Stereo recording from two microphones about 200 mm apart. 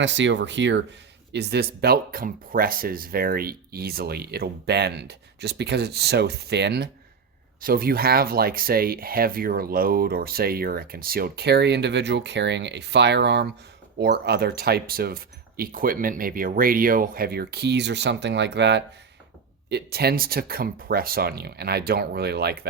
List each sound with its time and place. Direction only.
0.0 s speech: 65° right (ahead or behind)